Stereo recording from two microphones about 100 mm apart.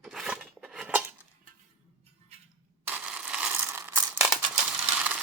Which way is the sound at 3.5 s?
25° right (ahead or behind).